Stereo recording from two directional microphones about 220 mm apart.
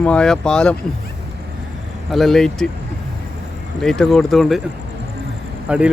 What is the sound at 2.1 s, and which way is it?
Speech, centre (ahead or behind).